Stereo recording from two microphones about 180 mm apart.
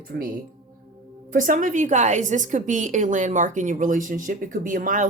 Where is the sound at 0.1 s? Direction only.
60° right (ahead or behind).